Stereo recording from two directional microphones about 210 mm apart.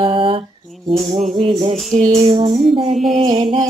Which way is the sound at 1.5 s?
25° right (ahead or behind).